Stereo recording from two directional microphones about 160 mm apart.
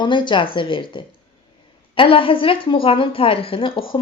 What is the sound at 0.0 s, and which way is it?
A woman's voice, 30° left (ahead or behind).